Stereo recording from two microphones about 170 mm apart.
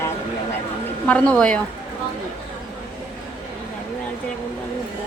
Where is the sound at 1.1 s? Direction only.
5° left (ahead or behind).